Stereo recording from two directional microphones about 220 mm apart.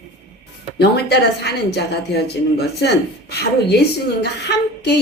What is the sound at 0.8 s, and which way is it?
A woman's voice, 45° left (ahead or behind).